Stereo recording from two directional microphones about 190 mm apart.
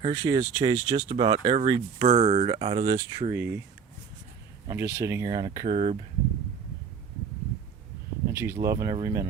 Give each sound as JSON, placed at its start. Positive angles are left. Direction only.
{"t": 0.0, "sound": "speech", "side_deg": -25}
{"t": 3.3, "sound": "speech", "side_deg": -10}
{"t": 4.7, "sound": "speech", "side_deg": -15}
{"t": 5.6, "sound": "speech", "side_deg": -35}
{"t": 8.3, "sound": "speech", "side_deg": -15}